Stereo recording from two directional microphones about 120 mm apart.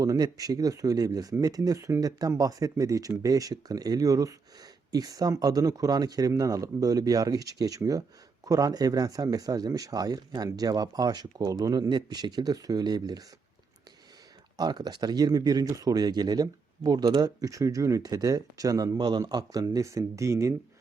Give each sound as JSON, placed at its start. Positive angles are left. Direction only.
{"t": 0.0, "sound": "speech", "side_deg": -30}
{"t": 14.5, "sound": "speech", "side_deg": -35}